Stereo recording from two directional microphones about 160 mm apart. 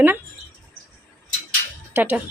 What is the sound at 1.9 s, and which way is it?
Speech, 10° right (ahead or behind).